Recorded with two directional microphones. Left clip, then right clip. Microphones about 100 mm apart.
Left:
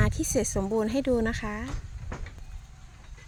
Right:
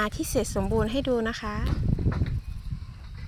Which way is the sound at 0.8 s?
35° left (ahead or behind).